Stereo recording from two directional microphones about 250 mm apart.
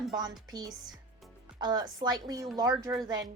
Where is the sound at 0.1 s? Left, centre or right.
Centre.